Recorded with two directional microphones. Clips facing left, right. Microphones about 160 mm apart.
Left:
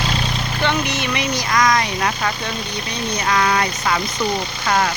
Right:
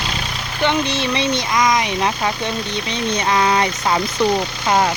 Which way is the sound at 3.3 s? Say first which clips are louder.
Right 1 dB; 25° right (ahead or behind).